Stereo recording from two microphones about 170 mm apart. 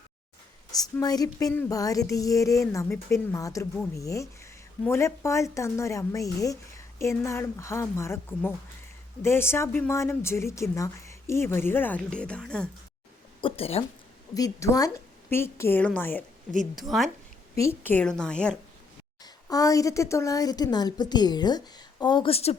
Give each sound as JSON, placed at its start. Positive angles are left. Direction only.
{"t": 1.0, "sound": "a woman's voice", "side_deg": 20}
{"t": 13.4, "sound": "speech", "side_deg": 35}
{"t": 14.3, "sound": "speech", "side_deg": 20}
{"t": 16.7, "sound": "a woman's voice", "side_deg": 0}
{"t": 17.6, "sound": "a woman's voice", "side_deg": 15}
{"t": 19.2, "sound": "a woman's voice", "side_deg": 20}